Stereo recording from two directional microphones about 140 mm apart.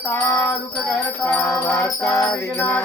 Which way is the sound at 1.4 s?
20° left (ahead or behind).